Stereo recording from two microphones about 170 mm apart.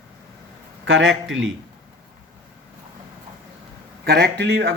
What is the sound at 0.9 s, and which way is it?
Speech, 90° right.